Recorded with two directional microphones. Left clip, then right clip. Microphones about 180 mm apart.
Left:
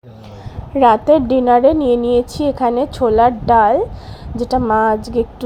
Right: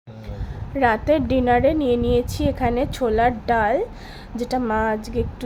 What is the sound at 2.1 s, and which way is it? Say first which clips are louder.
Speech: left 6 dB; 20° left (ahead or behind).